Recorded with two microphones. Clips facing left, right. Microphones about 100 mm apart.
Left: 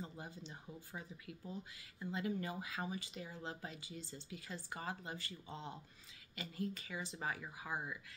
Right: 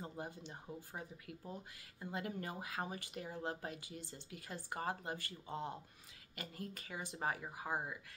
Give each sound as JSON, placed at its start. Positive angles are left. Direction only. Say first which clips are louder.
{"t": 0.2, "sound": "speech", "louder": "right 3 dB", "side_deg": -50}